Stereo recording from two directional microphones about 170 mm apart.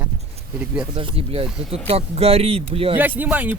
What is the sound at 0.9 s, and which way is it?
Speech, 30° right (ahead or behind).